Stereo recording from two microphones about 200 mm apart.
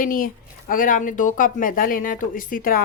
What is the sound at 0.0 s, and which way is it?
Speech, 45° left (ahead or behind).